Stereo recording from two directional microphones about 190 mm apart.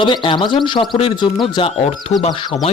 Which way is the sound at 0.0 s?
25° left (ahead or behind).